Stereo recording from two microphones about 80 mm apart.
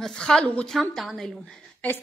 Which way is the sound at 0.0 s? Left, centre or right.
Centre.